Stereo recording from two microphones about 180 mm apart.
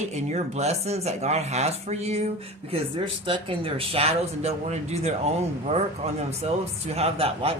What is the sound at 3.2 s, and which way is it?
Speech, 30° right (ahead or behind).